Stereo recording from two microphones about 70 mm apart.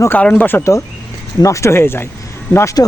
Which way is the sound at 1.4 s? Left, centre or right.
Left.